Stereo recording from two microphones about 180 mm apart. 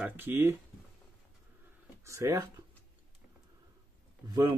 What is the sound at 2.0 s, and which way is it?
Speech, 15° right (ahead or behind).